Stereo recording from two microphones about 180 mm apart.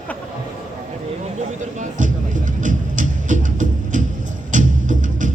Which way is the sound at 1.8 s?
45° right (ahead or behind).